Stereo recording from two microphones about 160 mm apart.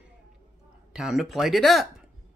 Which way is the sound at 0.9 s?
5° right (ahead or behind).